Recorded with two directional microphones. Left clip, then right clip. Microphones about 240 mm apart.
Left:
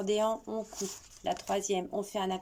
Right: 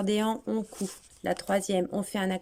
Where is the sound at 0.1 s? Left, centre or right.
Right.